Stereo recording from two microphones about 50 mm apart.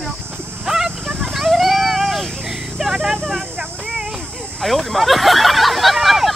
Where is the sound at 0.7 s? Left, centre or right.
Centre.